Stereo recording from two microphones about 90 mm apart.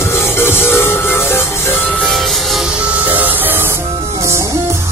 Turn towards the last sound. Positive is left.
turn(degrees=-20)  # may be behind; listen again after turning